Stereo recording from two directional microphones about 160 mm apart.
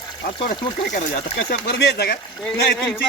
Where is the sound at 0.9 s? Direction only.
55° left (ahead or behind).